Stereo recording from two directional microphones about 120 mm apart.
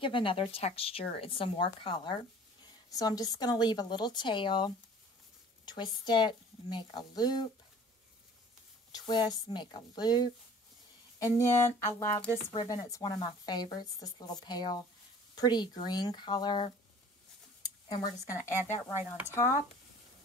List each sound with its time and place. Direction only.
0.0 s speech: 45° left (ahead or behind)
2.6 s speech: 30° left (ahead or behind)
8.9 s speech: 35° left (ahead or behind)
12.4 s speech: 35° left (ahead or behind)
17.6 s a sound: 35° left (ahead or behind)
19.2 s speech: 25° left (ahead or behind)